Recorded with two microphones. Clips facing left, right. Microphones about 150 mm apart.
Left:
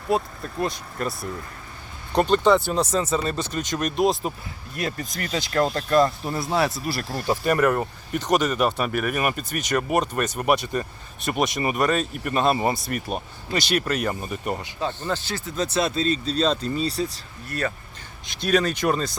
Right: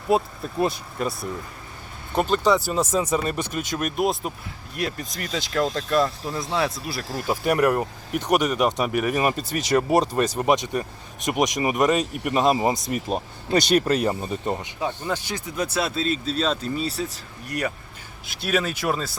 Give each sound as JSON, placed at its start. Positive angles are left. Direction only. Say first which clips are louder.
{"t": 0.4, "sound": "speech", "louder": "right 3 dB", "side_deg": -10}
{"t": 7.3, "sound": "speech", "louder": "even", "side_deg": -10}
{"t": 18.3, "sound": "speech", "louder": "left 3 dB", "side_deg": -5}